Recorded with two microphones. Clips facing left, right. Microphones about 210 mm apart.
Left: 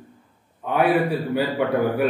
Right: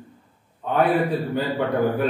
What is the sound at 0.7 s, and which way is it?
A man's voice, 10° left (ahead or behind).